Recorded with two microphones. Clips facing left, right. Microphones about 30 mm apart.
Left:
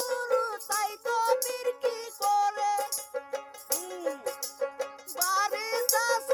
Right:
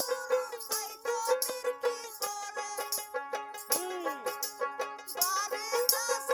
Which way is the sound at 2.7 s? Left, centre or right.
Centre.